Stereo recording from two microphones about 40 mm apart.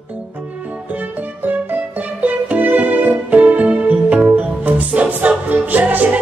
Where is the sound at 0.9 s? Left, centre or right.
Right.